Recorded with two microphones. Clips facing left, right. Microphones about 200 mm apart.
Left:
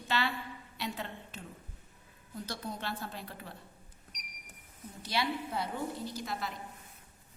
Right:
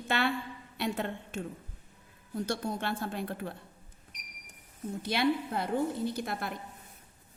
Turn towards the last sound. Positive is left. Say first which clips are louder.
# right 5 dB
turn(degrees=-55)  # may be behind; listen again after turning